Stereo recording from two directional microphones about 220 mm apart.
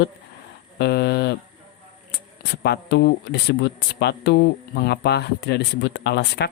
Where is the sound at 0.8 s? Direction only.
50° left (ahead or behind).